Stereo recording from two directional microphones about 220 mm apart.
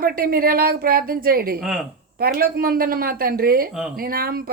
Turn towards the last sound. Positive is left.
turn(degrees=-40)  # may be behind; listen again after turning